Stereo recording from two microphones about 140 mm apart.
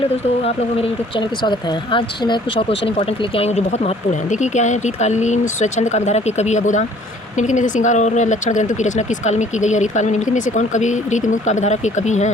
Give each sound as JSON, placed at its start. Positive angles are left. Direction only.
{"t": 0.4, "sound": "speech", "side_deg": 40}